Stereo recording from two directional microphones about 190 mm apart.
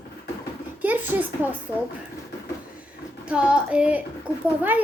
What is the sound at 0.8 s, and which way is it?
Speech, 10° right (ahead or behind).